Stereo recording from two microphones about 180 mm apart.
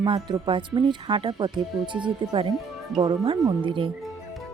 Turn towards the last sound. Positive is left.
turn(degrees=-30)  # may be behind; listen again after turning